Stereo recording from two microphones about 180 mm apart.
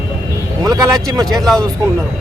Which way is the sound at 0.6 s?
20° right (ahead or behind).